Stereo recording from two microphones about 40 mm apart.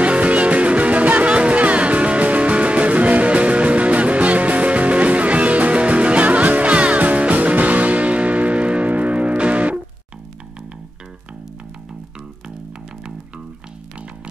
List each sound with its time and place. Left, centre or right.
0.0 s music: right